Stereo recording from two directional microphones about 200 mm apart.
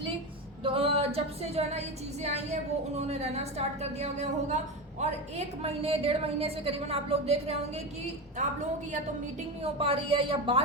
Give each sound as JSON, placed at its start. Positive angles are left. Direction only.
{"t": 0.6, "sound": "music", "side_deg": -30}
{"t": 2.2, "sound": "a woman's voice", "side_deg": -35}
{"t": 9.7, "sound": "a woman's voice", "side_deg": -25}